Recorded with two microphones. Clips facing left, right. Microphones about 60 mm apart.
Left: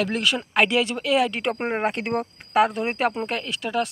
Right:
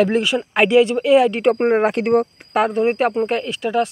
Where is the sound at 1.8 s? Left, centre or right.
Right.